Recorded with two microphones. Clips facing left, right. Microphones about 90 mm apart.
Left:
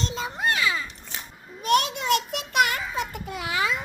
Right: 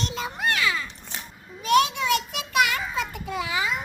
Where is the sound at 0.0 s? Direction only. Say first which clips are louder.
Even; 25° left (ahead or behind).